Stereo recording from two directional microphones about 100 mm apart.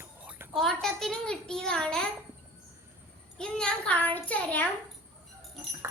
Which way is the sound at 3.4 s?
10° left (ahead or behind).